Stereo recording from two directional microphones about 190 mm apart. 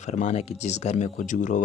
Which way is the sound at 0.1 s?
35° left (ahead or behind).